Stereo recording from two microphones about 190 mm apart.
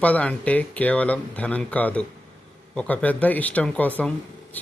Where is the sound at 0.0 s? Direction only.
5° left (ahead or behind).